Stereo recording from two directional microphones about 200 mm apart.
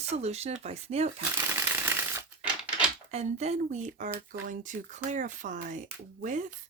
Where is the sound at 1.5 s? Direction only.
15° right (ahead or behind).